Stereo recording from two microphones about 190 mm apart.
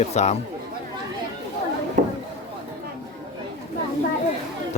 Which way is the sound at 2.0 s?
40° right (ahead or behind).